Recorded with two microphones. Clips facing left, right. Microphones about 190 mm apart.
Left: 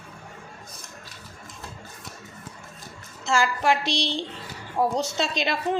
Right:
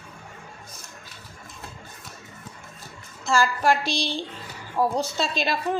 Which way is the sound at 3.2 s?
20° left (ahead or behind).